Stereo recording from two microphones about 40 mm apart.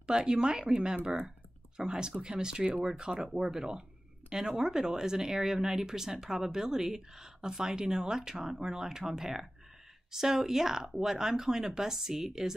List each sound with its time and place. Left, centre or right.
0.0 s speech: centre